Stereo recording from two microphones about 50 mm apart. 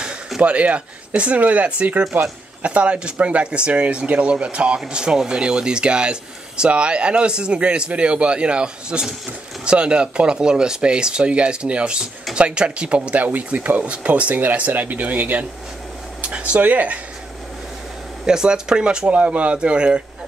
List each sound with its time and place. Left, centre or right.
0.4 s speech: right
18.2 s speech: centre
19.0 s speech: right